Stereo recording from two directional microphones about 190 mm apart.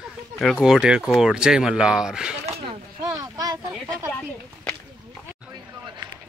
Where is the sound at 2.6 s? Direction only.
25° right (ahead or behind).